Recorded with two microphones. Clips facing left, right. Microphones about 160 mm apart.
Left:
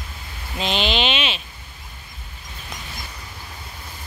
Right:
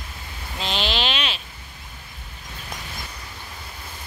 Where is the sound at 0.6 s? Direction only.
Centre (ahead or behind).